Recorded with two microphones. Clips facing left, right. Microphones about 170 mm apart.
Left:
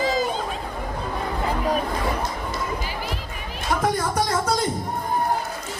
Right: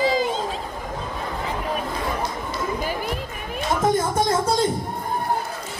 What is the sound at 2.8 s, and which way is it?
Basketball bounce, 50° right (ahead or behind).